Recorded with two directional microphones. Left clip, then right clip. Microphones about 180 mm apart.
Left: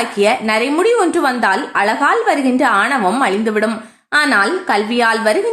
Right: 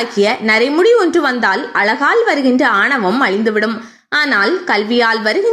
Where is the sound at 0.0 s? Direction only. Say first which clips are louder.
Even; 20° right (ahead or behind).